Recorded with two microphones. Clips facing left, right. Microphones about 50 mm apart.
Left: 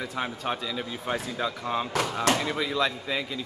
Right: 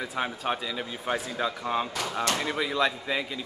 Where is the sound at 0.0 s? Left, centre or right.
Centre.